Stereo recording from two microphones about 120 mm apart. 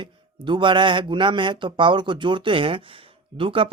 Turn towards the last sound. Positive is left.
turn(degrees=-45)  # may be behind; listen again after turning